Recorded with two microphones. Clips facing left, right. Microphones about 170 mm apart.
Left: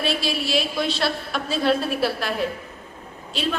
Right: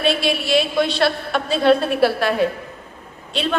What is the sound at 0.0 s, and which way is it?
A woman's voice, 60° right (ahead or behind).